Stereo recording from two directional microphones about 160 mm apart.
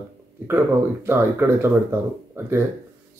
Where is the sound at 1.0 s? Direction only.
15° right (ahead or behind).